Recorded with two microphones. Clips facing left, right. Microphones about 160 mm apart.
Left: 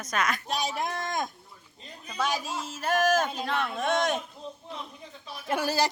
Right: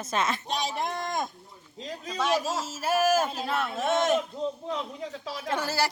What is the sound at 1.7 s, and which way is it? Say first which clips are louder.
Speech: right 10 dB; 90° right.